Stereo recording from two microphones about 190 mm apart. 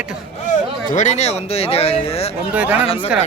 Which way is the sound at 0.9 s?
40° left (ahead or behind).